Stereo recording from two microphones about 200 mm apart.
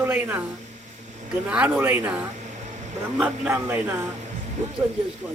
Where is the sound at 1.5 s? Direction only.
5° right (ahead or behind).